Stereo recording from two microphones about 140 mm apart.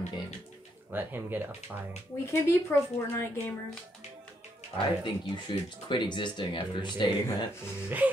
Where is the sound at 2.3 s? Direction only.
20° left (ahead or behind).